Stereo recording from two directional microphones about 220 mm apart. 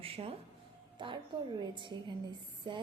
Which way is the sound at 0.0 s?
25° right (ahead or behind).